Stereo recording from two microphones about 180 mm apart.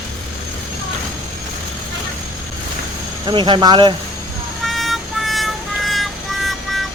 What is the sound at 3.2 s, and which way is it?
Speech, 25° right (ahead or behind).